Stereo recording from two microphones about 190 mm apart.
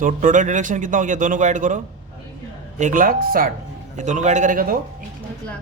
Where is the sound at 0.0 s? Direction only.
45° right (ahead or behind).